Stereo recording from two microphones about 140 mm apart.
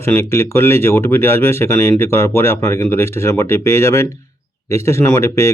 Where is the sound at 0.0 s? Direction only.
20° left (ahead or behind).